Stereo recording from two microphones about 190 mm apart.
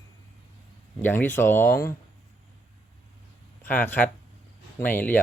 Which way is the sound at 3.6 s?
10° left (ahead or behind).